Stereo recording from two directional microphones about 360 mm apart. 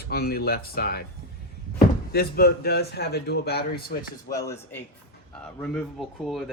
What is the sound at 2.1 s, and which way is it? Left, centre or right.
Speech, left.